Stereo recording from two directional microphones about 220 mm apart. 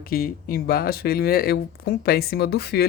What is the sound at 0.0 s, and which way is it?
Speech, 40° left (ahead or behind).